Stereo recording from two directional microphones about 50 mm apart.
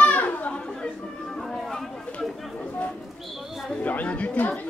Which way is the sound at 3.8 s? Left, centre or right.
Left.